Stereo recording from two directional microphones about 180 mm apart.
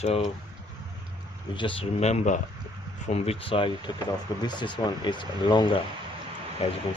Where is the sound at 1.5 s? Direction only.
30° left (ahead or behind).